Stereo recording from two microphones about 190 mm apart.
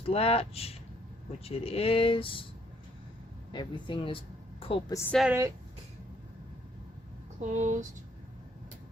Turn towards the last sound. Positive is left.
turn(degrees=-40)  # may be behind; listen again after turning